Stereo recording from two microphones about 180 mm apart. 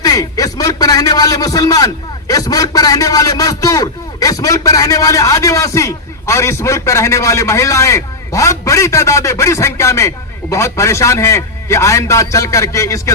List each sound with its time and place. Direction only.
0.0 s a man's voice: 20° left (ahead or behind)